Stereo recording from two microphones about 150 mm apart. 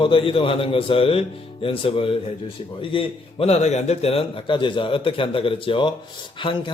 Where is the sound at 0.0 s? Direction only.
35° left (ahead or behind).